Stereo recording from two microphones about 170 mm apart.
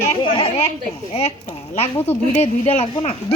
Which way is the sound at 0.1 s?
30° left (ahead or behind).